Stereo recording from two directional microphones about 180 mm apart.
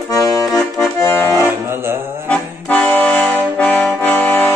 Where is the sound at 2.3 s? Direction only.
10° left (ahead or behind).